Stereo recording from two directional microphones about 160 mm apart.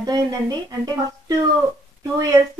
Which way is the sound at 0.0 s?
25° right (ahead or behind).